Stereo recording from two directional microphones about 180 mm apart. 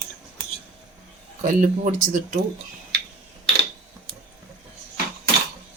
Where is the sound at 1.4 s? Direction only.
45° right (ahead or behind).